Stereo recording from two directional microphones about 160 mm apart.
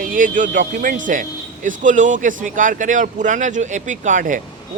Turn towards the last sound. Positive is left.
turn(degrees=-55)  # may be behind; listen again after turning